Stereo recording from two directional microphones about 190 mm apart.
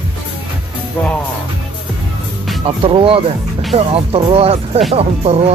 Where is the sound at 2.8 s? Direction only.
25° right (ahead or behind).